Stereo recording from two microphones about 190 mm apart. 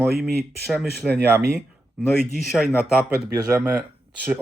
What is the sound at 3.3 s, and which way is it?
Speech, 20° right (ahead or behind).